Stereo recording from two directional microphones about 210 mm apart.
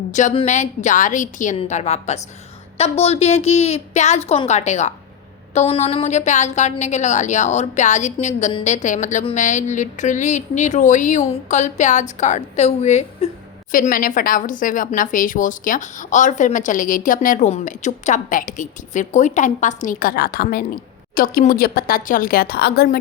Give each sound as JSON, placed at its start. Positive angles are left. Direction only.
{"t": 0.1, "sound": "a woman's voice", "side_deg": 35}